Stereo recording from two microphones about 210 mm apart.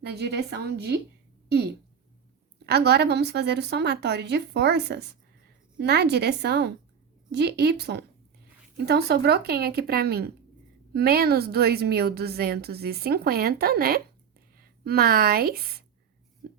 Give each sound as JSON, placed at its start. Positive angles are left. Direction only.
{"t": 0.0, "sound": "a woman's voice", "side_deg": -50}
{"t": 2.6, "sound": "a woman's voice", "side_deg": -50}